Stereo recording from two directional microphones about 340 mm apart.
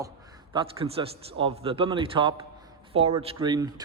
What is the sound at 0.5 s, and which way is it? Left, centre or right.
A man's voice, centre.